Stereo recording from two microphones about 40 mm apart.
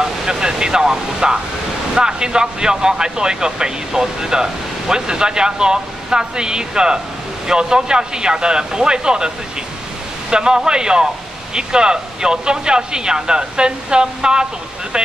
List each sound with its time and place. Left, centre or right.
0.0 s a sound: centre
2.0 s speech: centre
10.3 s speech: centre